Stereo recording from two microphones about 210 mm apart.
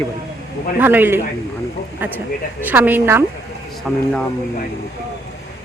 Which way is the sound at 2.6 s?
10° right (ahead or behind).